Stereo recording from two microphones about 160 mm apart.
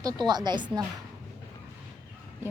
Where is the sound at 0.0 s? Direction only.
25° right (ahead or behind).